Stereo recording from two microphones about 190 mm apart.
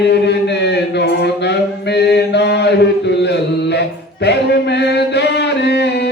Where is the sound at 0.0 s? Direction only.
65° left (ahead or behind).